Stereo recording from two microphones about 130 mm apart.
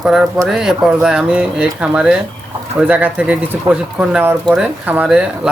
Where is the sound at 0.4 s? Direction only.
5° right (ahead or behind).